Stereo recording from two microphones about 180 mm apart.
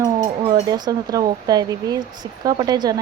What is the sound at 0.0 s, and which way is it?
Speech, 20° right (ahead or behind).